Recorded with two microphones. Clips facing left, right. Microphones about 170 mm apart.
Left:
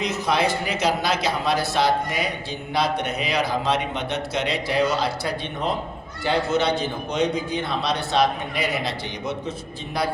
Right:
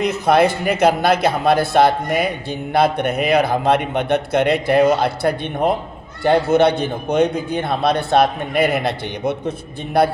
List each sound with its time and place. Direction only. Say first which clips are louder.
0.0 s speech: right 8 dB; 55° right (ahead or behind)